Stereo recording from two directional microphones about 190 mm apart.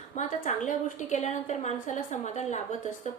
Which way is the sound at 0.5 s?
40° left (ahead or behind).